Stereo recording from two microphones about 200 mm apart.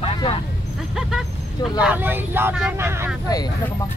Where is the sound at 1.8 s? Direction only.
10° right (ahead or behind).